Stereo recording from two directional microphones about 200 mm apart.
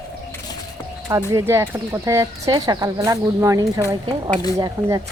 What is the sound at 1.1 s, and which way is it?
Speech, 15° right (ahead or behind).